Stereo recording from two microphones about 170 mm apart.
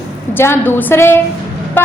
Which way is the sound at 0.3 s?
15° left (ahead or behind).